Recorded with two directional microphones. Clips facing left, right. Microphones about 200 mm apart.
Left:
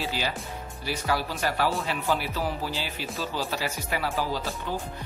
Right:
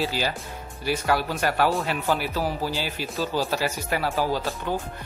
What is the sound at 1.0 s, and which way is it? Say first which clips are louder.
Speech: right 2 dB; 55° right (ahead or behind).